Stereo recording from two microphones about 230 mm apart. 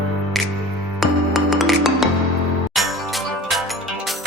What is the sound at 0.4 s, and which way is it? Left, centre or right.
Music, centre.